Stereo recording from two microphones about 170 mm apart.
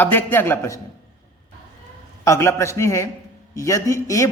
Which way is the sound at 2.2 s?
15° left (ahead or behind).